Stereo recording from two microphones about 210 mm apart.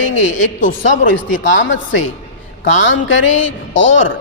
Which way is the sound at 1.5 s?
60° left (ahead or behind).